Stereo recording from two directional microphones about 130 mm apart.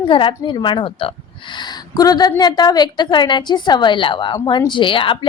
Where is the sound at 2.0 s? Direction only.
30° left (ahead or behind).